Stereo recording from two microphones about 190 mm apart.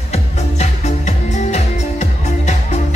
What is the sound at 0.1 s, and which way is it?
Music, 35° left (ahead or behind).